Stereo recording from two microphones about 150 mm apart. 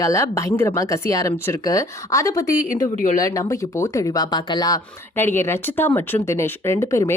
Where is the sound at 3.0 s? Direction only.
65° left (ahead or behind).